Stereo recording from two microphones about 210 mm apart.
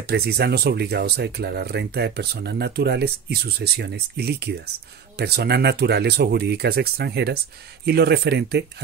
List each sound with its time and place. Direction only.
0.1 s speech: 50° right (ahead or behind)